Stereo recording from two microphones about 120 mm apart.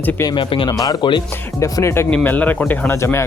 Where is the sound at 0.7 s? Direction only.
30° left (ahead or behind).